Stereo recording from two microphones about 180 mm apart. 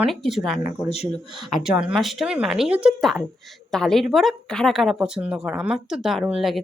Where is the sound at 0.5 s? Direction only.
40° left (ahead or behind).